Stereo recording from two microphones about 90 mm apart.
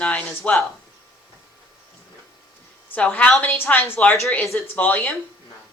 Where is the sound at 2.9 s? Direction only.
15° left (ahead or behind).